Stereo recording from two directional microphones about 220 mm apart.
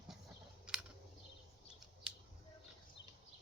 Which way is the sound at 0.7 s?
5° right (ahead or behind).